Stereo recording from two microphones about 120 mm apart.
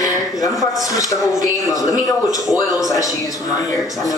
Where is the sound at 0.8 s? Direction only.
30° left (ahead or behind).